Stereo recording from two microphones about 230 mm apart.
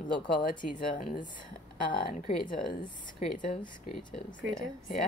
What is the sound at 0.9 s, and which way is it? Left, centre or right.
Speech, left.